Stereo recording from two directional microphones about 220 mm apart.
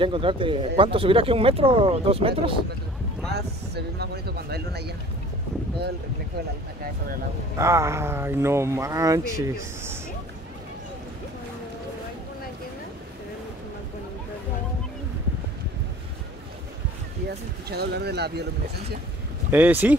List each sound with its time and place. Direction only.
0.0 s speech: 25° right (ahead or behind)
3.3 s speech: 50° right (ahead or behind)
7.5 s speech: 15° right (ahead or behind)
17.3 s speech: 45° right (ahead or behind)
19.5 s speech: 10° right (ahead or behind)